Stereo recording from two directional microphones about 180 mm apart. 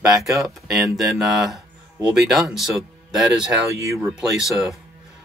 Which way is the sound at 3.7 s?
15° right (ahead or behind).